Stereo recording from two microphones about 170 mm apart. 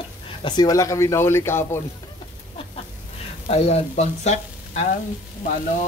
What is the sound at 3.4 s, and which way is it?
Speech, 40° left (ahead or behind).